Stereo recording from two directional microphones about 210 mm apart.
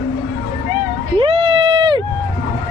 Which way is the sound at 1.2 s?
25° right (ahead or behind).